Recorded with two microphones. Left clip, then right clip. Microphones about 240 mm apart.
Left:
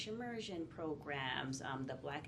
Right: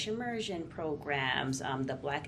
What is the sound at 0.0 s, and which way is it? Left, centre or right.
Speech, right.